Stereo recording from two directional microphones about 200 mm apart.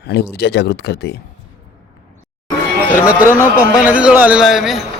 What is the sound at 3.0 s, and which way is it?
A man's voice, 10° right (ahead or behind).